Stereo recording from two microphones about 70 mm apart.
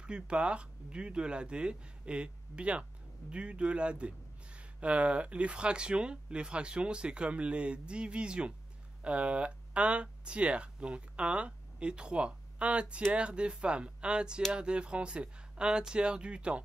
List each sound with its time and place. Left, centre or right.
0.0 s speech: centre